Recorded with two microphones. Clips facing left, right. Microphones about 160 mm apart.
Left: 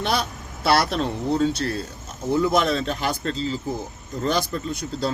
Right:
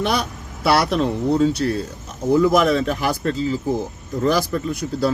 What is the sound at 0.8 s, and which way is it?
Speech, 40° right (ahead or behind).